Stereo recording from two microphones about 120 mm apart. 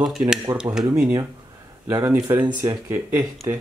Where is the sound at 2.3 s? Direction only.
35° right (ahead or behind).